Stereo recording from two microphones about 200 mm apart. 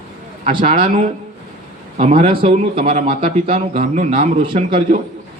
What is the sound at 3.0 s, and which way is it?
Speech, 25° right (ahead or behind).